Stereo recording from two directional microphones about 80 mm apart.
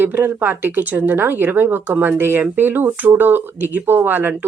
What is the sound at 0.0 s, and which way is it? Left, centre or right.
Speech, right.